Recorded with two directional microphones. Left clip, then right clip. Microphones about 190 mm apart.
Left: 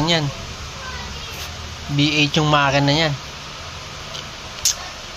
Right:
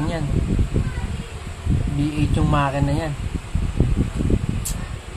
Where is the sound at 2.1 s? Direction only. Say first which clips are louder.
Left 7 dB; 20° left (ahead or behind).